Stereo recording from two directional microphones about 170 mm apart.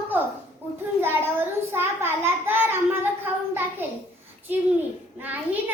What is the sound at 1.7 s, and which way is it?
Child singing, 15° right (ahead or behind).